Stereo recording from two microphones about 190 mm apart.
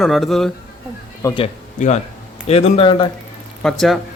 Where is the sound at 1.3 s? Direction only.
35° left (ahead or behind).